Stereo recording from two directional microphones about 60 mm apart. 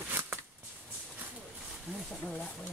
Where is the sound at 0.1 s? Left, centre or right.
Right.